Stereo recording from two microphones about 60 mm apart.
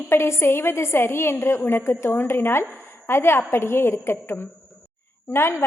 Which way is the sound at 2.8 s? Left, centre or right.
Left.